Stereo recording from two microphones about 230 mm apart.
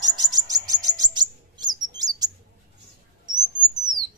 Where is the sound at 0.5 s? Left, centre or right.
Centre.